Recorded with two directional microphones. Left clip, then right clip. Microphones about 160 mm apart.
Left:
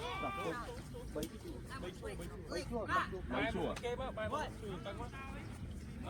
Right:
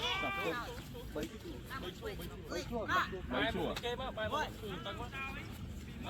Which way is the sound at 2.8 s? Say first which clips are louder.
Right 3 dB; 25° left (ahead or behind).